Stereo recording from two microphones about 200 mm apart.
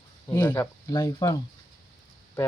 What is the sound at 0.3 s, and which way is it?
Speech, 10° left (ahead or behind).